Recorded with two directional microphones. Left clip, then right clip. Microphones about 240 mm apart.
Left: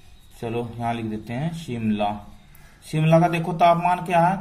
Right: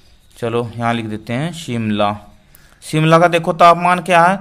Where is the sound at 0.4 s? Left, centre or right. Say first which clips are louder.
Right 9 dB; right.